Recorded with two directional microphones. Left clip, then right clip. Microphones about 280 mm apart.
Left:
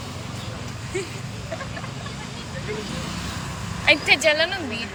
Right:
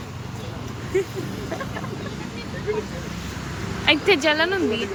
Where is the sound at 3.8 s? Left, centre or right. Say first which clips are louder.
Left 1 dB; centre.